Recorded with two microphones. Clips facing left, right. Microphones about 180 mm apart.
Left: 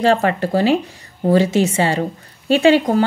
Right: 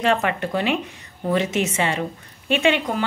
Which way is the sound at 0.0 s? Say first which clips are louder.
Left 5 dB; 35° left (ahead or behind).